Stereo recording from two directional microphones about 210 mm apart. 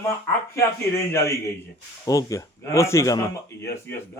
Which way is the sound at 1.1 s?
15° left (ahead or behind).